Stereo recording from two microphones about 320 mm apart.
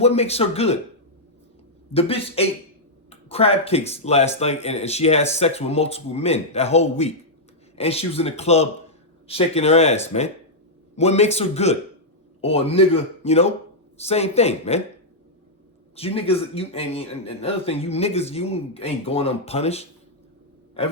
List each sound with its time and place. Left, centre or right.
0.0 s speech: centre
1.9 s a man's voice: centre
16.0 s a man's voice: centre